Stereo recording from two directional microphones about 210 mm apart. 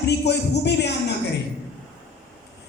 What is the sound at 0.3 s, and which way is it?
Speech, 55° left (ahead or behind).